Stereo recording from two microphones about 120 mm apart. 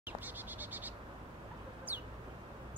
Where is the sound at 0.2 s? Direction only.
15° right (ahead or behind).